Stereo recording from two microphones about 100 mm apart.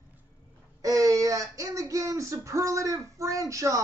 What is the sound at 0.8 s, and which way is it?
A man's voice, 35° right (ahead or behind).